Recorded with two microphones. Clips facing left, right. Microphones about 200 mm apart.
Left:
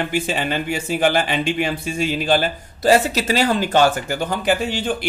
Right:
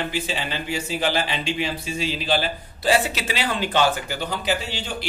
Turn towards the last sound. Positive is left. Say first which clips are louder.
# left 7 dB
turn(degrees=50)  # may be behind; listen again after turning